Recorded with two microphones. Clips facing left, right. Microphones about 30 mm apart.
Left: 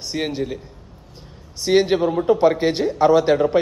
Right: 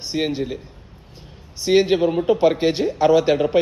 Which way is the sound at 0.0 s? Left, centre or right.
Centre.